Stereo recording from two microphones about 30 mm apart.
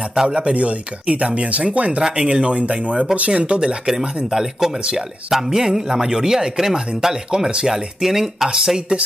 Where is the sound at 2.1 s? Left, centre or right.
Right.